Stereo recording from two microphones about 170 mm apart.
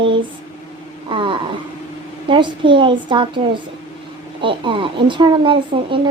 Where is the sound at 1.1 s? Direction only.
30° right (ahead or behind).